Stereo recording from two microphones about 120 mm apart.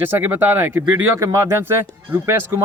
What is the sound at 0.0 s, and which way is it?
A man's voice, 15° right (ahead or behind).